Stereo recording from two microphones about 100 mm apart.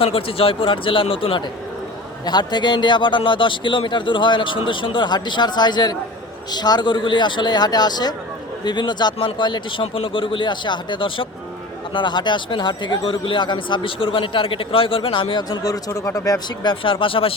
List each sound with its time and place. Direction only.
0.0 s speech: 65° left (ahead or behind)
2.2 s speech: 45° left (ahead or behind)
15.5 s speech: 40° left (ahead or behind)
16.6 s speech: 60° left (ahead or behind)